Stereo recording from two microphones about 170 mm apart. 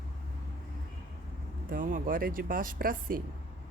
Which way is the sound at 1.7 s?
55° right (ahead or behind).